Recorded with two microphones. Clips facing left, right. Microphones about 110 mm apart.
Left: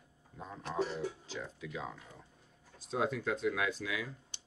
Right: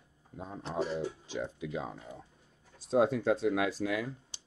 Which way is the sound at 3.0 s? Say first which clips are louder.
Right 7 dB; 40° right (ahead or behind).